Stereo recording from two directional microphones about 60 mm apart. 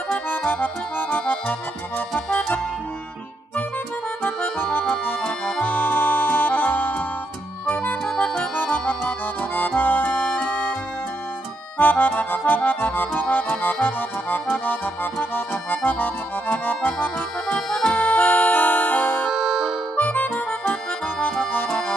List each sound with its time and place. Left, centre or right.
0.5 s accordion: left
4.2 s accordion: left
9.6 s music: left
11.8 s accordion: left
17.6 s accordion: centre
17.9 s music: left
19.2 s music: centre
20.0 s music: left
21.2 s accordion: centre